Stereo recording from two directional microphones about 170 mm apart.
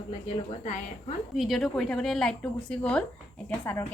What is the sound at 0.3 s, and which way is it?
Speech, 45° left (ahead or behind).